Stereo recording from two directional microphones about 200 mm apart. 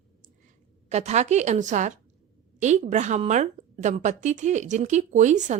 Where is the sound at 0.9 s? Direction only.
35° right (ahead or behind).